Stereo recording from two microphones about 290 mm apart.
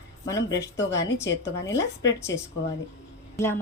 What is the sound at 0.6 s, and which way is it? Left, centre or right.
Speech, left.